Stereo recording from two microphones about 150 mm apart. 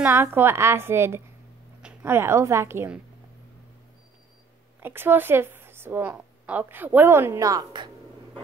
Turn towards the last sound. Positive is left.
turn(degrees=-25)  # may be behind; listen again after turning